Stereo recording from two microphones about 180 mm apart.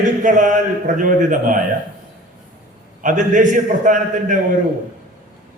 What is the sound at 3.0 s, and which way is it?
A man's voice, 45° right (ahead or behind).